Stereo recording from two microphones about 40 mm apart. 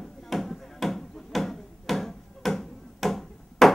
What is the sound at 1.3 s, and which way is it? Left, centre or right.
Music, centre.